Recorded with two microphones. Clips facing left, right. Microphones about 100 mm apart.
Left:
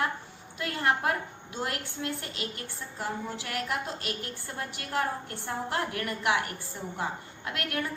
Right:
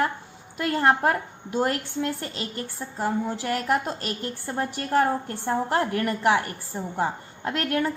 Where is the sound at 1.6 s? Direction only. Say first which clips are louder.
Right 9 dB; 35° right (ahead or behind).